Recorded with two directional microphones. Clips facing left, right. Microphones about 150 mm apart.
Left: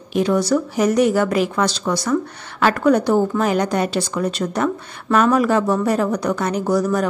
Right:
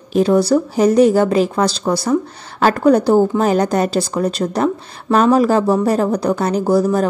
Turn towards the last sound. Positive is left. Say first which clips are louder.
# right 4 dB
turn(degrees=-30)  # may be behind; listen again after turning